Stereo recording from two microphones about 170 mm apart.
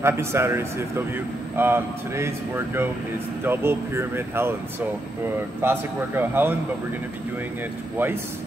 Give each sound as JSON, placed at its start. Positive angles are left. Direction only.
{"t": 0.0, "sound": "speech", "side_deg": -15}
{"t": 5.6, "sound": "speech", "side_deg": -10}